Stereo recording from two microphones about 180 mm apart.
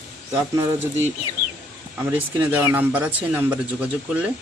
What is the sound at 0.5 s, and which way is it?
Speech, 15° right (ahead or behind).